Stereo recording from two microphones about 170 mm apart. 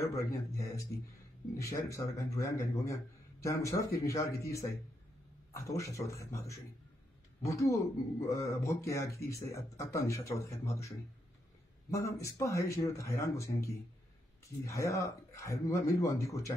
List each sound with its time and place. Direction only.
0.0 s a man's voice: 20° left (ahead or behind)
11.9 s a man's voice: 15° left (ahead or behind)
14.7 s a man's voice: 15° left (ahead or behind)